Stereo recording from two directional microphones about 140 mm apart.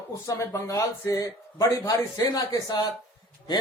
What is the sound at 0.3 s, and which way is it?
A man's voice, 25° left (ahead or behind).